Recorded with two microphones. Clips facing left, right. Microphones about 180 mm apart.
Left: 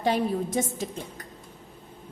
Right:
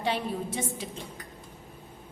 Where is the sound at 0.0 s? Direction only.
45° left (ahead or behind).